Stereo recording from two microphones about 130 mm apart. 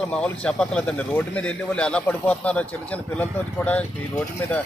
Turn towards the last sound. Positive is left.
turn(degrees=10)  # may be behind; listen again after turning